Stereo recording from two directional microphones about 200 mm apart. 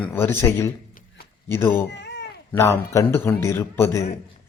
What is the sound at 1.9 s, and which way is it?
Cat, 60° left (ahead or behind).